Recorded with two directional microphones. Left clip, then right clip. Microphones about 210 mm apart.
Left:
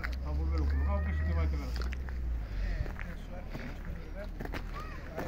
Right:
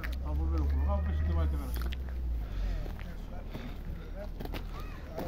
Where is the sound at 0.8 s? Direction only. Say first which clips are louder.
Even; 25° left (ahead or behind).